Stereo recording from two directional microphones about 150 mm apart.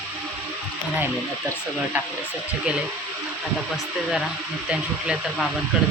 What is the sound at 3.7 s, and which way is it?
Speech, centre (ahead or behind).